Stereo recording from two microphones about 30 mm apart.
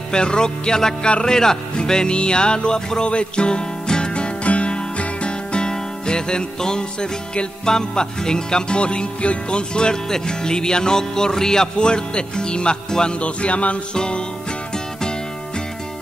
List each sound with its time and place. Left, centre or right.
0.1 s music: left
4.1 s music: left
10.0 s music: centre
13.2 s speech: left
13.9 s music: left